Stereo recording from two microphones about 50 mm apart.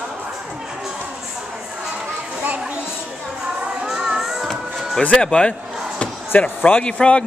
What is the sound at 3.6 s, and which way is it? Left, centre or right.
Music, centre.